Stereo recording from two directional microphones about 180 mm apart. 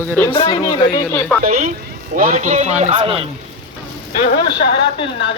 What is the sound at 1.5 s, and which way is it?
Speech, 45° right (ahead or behind).